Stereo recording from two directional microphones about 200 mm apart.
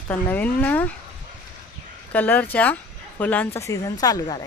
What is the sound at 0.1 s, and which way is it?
Speech, 10° left (ahead or behind).